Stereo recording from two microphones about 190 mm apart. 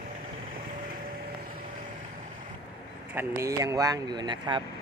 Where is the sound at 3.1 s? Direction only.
15° right (ahead or behind).